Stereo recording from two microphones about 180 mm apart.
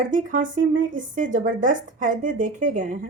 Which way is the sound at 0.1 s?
50° right (ahead or behind).